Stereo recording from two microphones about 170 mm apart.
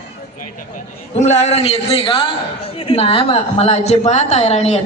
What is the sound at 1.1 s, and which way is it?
A woman's voice, 40° left (ahead or behind).